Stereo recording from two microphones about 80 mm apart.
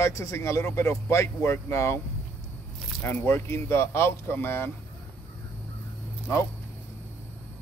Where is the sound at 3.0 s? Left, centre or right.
Left.